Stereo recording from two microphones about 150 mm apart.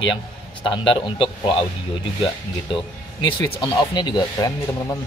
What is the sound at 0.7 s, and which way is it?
A man's voice, 35° left (ahead or behind).